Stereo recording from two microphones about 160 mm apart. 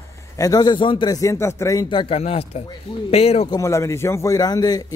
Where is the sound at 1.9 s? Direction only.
35° left (ahead or behind).